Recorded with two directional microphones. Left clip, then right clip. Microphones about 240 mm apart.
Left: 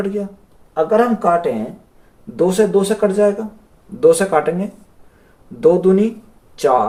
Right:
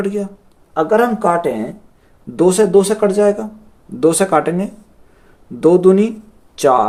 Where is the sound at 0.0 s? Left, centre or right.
Right.